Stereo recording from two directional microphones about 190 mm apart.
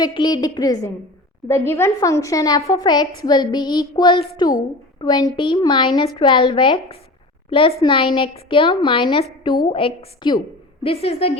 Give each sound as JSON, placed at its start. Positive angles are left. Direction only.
{"t": 0.0, "sound": "a woman's voice", "side_deg": 20}